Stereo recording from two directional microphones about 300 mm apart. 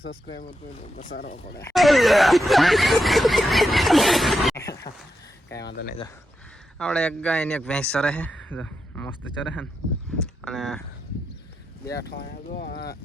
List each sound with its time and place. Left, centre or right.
0.9 s speech: left
1.6 s speech: centre
5.6 s speech: left
6.7 s speech: centre
10.4 s speech: centre
12.0 s speech: left